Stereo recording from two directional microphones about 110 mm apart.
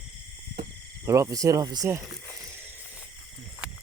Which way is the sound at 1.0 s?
30° right (ahead or behind).